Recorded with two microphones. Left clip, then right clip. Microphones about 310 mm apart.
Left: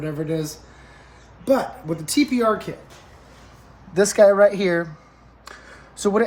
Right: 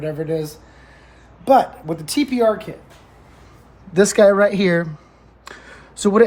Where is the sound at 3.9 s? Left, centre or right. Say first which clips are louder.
Right 2 dB; right.